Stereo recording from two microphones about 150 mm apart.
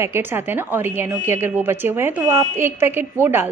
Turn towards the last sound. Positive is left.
turn(degrees=-15)  # may be behind; listen again after turning